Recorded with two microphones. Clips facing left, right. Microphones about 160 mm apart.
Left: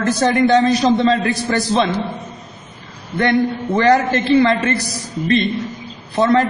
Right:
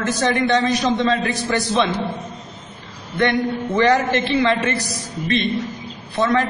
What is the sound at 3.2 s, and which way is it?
A man's voice, 35° left (ahead or behind).